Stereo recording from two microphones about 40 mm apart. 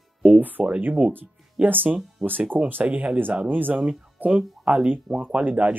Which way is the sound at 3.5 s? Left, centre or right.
Right.